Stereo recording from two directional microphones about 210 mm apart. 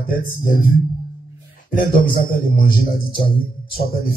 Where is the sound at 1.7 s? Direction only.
40° left (ahead or behind).